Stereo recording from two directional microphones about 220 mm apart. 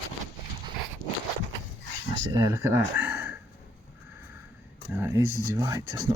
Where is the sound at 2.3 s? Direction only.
15° right (ahead or behind).